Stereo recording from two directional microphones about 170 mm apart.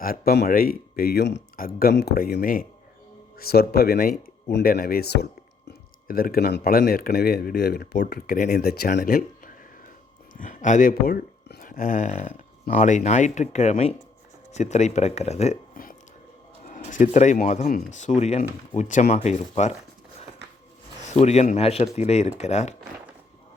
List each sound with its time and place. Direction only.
0.0 s speech: 60° left (ahead or behind)
8.4 s speech: 55° left (ahead or behind)
8.9 s speech: 50° left (ahead or behind)
10.3 s speech: 50° left (ahead or behind)
21.0 s speech: 40° left (ahead or behind)